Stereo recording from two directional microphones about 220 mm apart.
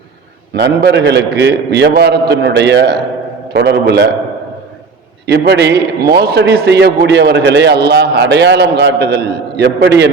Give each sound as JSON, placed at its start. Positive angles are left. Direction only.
{"t": 0.5, "sound": "a man's voice", "side_deg": -50}
{"t": 5.2, "sound": "a man's voice", "side_deg": -50}